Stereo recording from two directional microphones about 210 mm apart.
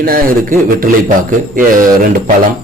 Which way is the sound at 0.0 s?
45° right (ahead or behind).